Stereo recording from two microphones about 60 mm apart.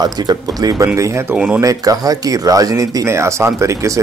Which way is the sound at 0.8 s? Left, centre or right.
Right.